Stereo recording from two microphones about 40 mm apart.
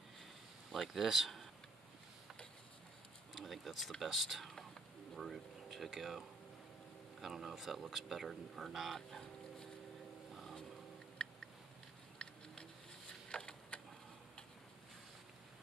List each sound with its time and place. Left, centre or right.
0.7 s speech: centre
3.3 s speech: centre
11.2 s a sound: left